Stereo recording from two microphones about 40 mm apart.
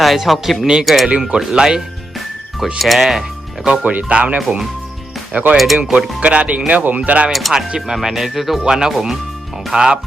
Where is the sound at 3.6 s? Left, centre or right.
Right.